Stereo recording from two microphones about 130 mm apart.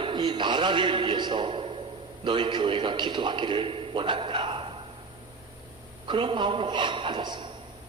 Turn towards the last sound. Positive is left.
turn(degrees=-35)  # may be behind; listen again after turning